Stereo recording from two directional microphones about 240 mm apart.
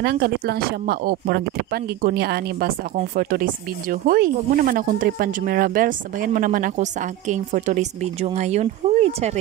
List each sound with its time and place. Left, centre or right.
0.0 s speech: right